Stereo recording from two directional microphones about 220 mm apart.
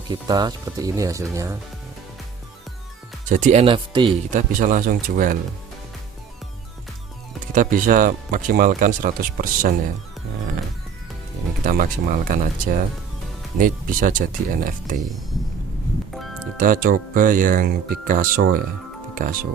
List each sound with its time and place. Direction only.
0.1 s speech: 20° right (ahead or behind)
3.2 s speech: 35° right (ahead or behind)
4.3 s speech: 35° right (ahead or behind)
7.5 s speech: 35° right (ahead or behind)
11.6 s speech: 35° right (ahead or behind)
16.6 s speech: 40° right (ahead or behind)